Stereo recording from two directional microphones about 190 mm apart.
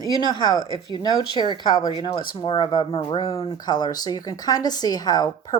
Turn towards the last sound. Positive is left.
turn(degrees=20)  # may be behind; listen again after turning